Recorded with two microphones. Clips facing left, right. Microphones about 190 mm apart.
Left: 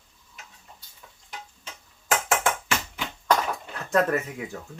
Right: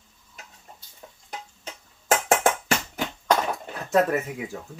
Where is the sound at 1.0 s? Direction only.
40° right (ahead or behind).